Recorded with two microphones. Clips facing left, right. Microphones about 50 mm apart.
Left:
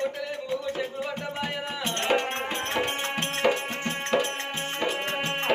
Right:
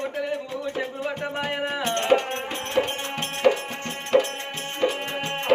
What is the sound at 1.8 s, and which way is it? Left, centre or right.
Music, centre.